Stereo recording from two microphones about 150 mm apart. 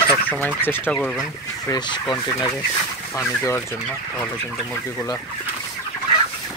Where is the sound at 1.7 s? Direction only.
30° left (ahead or behind).